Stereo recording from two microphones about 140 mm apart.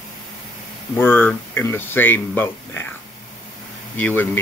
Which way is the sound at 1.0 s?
15° left (ahead or behind).